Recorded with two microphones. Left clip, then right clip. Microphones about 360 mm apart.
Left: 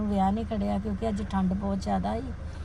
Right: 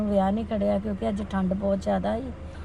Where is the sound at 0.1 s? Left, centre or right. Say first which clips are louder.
Right 3 dB; centre.